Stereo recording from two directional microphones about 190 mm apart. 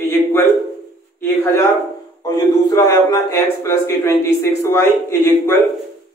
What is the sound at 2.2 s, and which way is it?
A man's voice, 20° left (ahead or behind).